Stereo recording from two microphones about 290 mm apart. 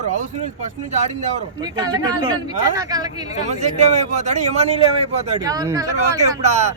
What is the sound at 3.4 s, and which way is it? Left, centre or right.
A man's voice, right.